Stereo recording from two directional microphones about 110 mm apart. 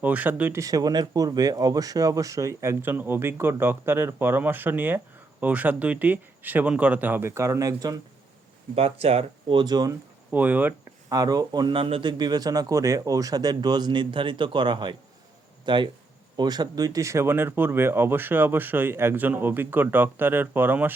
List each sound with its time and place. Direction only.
0.0 s speech: 15° right (ahead or behind)
0.6 s speech: 35° right (ahead or behind)
8.7 s speech: 65° right (ahead or behind)
9.6 s speech: 40° right (ahead or behind)
10.3 s speech: 15° right (ahead or behind)
11.1 s speech: 35° right (ahead or behind); by 12.1 s 55° right (ahead or behind)
12.1 s speech: 40° right (ahead or behind); by 20.9 s 20° right (ahead or behind)